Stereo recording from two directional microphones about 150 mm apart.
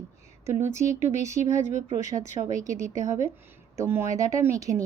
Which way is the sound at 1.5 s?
50° left (ahead or behind).